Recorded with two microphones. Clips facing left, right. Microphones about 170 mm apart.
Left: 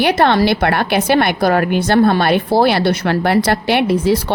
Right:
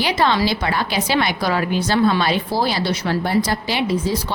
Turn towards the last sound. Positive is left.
turn(degrees=65)  # may be behind; listen again after turning